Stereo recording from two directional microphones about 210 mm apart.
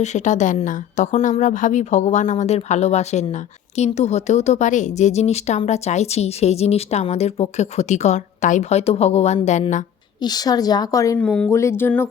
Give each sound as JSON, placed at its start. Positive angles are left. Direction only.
{"t": 0.0, "sound": "speech", "side_deg": 35}
{"t": 10.2, "sound": "a woman's voice", "side_deg": 20}